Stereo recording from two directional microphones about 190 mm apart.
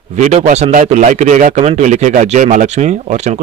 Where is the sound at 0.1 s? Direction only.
35° right (ahead or behind).